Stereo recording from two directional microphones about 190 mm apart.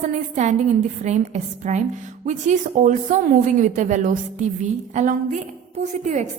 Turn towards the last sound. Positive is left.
turn(degrees=-40)  # may be behind; listen again after turning